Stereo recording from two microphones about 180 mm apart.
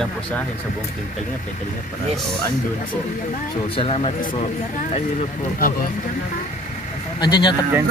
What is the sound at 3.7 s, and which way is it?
Speech, 30° left (ahead or behind).